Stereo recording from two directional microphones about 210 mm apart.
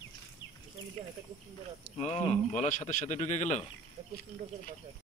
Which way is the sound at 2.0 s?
30° left (ahead or behind).